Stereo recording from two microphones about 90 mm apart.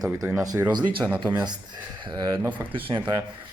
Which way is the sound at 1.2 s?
55° right (ahead or behind).